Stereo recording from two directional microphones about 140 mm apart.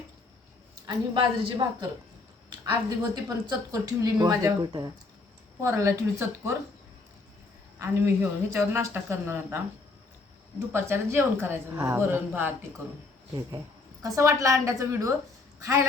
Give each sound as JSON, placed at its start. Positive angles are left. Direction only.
{"t": 0.9, "sound": "a woman's voice", "side_deg": -30}
{"t": 3.0, "sound": "speech", "side_deg": -30}
{"t": 7.8, "sound": "speech", "side_deg": -20}
{"t": 10.7, "sound": "speech", "side_deg": -20}
{"t": 14.0, "sound": "speech", "side_deg": -25}